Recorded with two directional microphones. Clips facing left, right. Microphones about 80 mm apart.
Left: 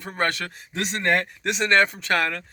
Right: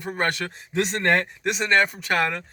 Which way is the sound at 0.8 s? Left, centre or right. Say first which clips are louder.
Right 2 dB; right.